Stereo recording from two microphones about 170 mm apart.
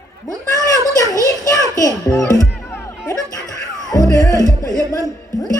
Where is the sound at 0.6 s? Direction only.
20° left (ahead or behind).